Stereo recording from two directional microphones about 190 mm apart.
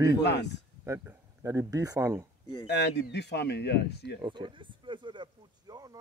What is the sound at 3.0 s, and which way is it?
Speech, 60° left (ahead or behind).